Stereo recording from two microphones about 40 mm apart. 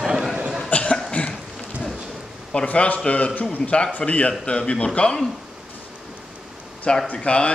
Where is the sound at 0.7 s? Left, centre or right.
Left.